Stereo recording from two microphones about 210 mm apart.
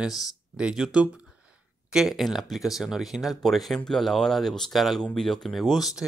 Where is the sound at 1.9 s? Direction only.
Centre (ahead or behind).